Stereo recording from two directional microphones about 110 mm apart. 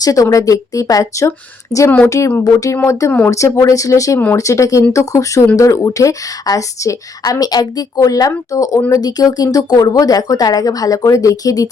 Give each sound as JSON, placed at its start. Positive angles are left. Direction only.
{"t": 0.0, "sound": "speech", "side_deg": 30}